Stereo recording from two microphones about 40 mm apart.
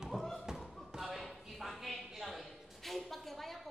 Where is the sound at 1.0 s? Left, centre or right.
Centre.